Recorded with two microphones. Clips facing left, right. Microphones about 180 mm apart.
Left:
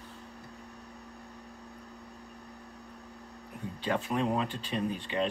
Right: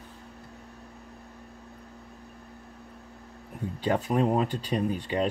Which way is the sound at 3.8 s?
40° right (ahead or behind).